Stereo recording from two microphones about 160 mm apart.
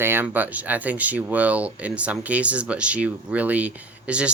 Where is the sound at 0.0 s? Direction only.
15° right (ahead or behind).